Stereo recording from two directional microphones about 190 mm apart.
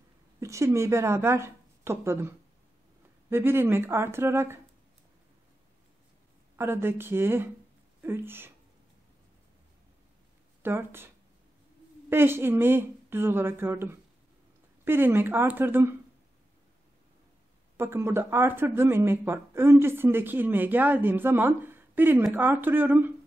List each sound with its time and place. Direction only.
0.4 s speech: 15° right (ahead or behind)
6.6 s speech: 10° right (ahead or behind)
10.6 s speech: 10° right (ahead or behind)
12.1 s speech: 10° right (ahead or behind)
17.7 s speech: 15° right (ahead or behind)